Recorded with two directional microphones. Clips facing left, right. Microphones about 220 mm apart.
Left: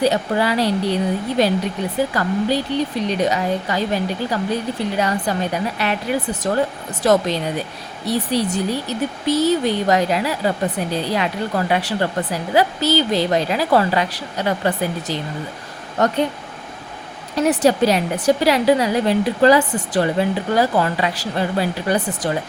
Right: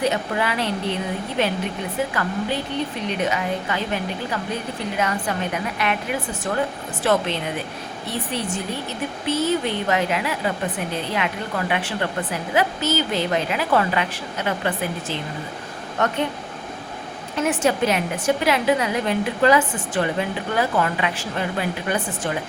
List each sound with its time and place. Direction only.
0.0 s a woman's voice: 35° left (ahead or behind)
17.3 s a woman's voice: 35° left (ahead or behind)